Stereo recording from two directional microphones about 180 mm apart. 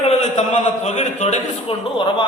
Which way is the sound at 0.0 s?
35° left (ahead or behind).